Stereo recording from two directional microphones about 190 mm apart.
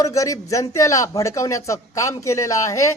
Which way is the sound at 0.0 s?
15° left (ahead or behind).